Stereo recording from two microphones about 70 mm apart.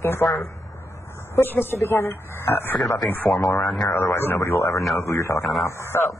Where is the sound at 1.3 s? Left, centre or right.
Left.